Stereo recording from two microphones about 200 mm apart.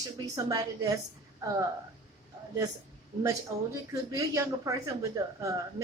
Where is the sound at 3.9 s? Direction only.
15° right (ahead or behind).